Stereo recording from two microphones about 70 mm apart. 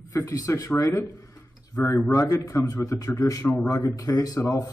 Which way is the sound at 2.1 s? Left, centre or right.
Left.